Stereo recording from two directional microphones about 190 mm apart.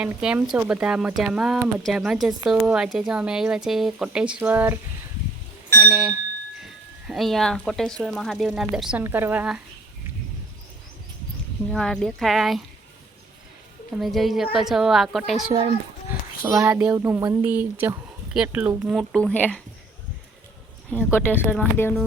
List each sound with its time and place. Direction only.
0.0 s speech: 5° right (ahead or behind)
5.8 s speech: 5° right (ahead or behind)
11.7 s speech: centre (ahead or behind)
13.9 s speech: centre (ahead or behind)
15.5 s a child's voice: 25° right (ahead or behind)
16.4 s a woman's voice: 10° right (ahead or behind); by 19.6 s 5° left (ahead or behind)
21.1 s speech: 10° left (ahead or behind)